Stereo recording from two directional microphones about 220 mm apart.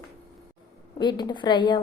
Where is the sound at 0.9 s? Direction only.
20° left (ahead or behind).